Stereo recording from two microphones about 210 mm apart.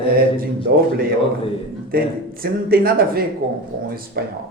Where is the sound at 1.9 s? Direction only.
45° right (ahead or behind).